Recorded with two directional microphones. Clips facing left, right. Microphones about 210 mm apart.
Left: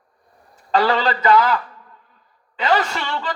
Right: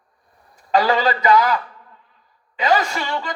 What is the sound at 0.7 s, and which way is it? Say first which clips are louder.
Speech: right 1 dB; 15° right (ahead or behind).